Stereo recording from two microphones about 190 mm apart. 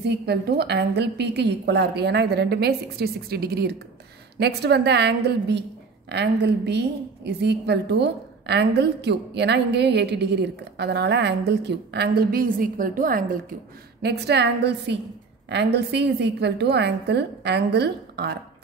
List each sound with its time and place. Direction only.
0.0 s a woman's voice: 60° right (ahead or behind)
14.0 s a woman's voice: 60° right (ahead or behind)